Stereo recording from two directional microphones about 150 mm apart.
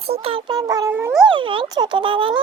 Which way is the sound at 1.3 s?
35° right (ahead or behind).